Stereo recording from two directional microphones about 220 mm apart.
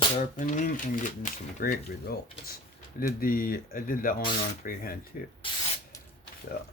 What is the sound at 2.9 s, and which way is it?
Speech, 40° left (ahead or behind).